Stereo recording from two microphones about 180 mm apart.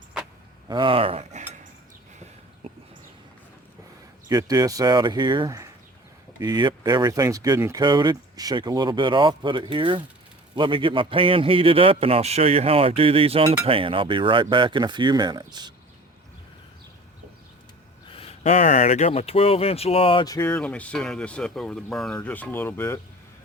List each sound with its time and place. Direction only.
0.7 s cutlery: 30° right (ahead or behind)
4.3 s a man's voice: 20° right (ahead or behind)
18.1 s speech: 35° left (ahead or behind); by 23.0 s 10° left (ahead or behind)